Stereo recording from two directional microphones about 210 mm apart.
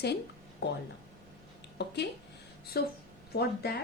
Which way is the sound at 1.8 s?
55° left (ahead or behind).